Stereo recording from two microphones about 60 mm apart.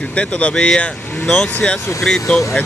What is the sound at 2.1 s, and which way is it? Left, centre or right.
Speech, centre.